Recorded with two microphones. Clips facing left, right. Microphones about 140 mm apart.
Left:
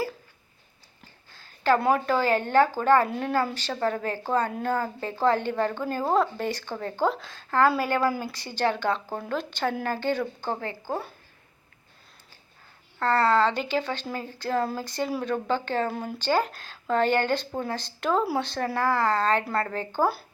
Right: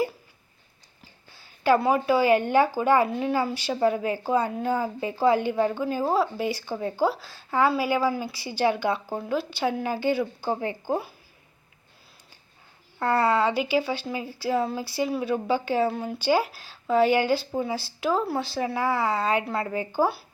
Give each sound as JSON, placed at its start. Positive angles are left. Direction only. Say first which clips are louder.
{"t": 1.3, "sound": "a sound", "louder": "right 2 dB", "side_deg": -10}
{"t": 1.8, "sound": "a woman's voice", "louder": "right 2 dB", "side_deg": -5}
{"t": 13.0, "sound": "a woman's voice", "louder": "even", "side_deg": -10}